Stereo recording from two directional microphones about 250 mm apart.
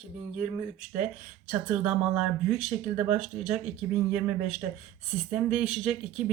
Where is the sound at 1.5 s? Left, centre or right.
Centre.